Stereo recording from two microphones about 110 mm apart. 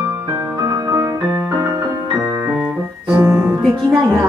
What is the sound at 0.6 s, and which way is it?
Music, 30° right (ahead or behind).